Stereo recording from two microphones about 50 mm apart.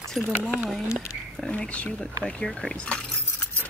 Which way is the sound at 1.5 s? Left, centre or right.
Left.